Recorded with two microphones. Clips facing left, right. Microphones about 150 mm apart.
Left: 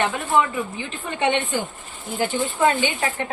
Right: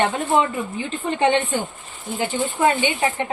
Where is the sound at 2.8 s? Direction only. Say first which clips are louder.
Right 2 dB; 20° right (ahead or behind).